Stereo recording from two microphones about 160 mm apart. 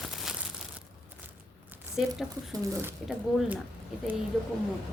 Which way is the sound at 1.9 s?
Centre (ahead or behind).